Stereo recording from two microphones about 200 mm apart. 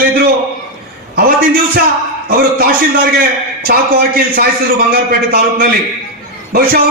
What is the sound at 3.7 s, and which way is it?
A man's voice, 45° right (ahead or behind).